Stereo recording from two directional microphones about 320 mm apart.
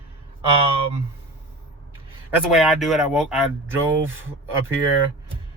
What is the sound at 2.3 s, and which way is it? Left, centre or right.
Speech, centre.